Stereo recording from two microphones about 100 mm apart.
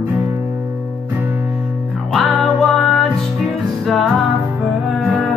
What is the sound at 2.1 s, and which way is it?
Music, centre (ahead or behind).